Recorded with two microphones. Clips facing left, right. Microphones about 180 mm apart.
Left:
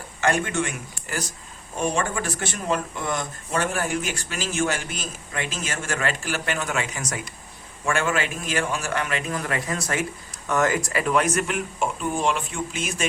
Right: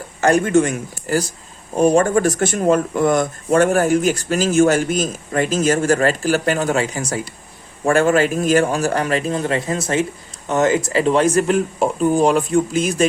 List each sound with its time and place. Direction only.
0.2 s speech: 40° right (ahead or behind)